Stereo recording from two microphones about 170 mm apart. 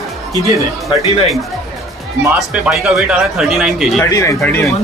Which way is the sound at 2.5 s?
5° right (ahead or behind).